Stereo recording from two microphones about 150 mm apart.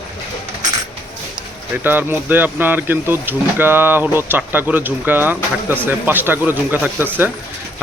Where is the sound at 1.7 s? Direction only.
15° right (ahead or behind).